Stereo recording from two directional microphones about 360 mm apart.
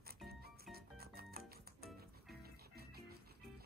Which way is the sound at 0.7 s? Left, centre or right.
Right.